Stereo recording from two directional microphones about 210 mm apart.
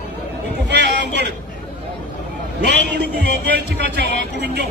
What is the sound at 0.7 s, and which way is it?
Speech, 55° right (ahead or behind).